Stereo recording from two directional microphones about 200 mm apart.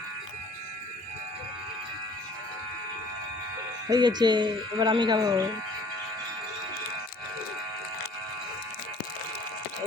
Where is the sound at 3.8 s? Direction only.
20° right (ahead or behind).